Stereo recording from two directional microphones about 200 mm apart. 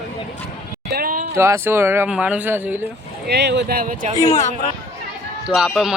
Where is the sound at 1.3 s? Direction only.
15° right (ahead or behind).